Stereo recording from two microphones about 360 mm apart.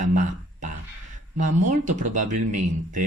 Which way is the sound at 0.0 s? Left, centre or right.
Right.